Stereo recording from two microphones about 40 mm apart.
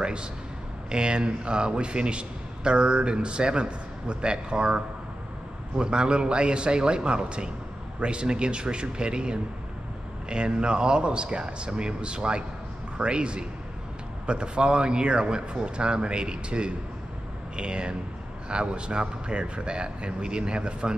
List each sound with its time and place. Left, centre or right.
0.0 s a man's voice: right